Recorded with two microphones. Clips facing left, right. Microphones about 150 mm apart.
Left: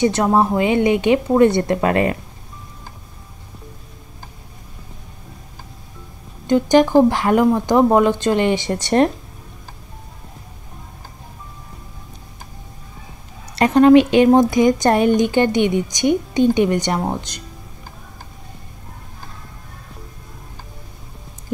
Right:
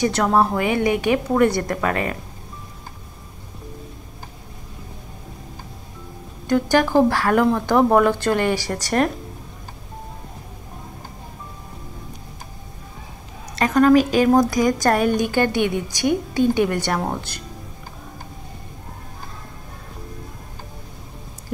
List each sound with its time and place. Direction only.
0.0 s speech: 20° left (ahead or behind)
6.4 s speech: 20° left (ahead or behind)
13.6 s speech: 30° left (ahead or behind)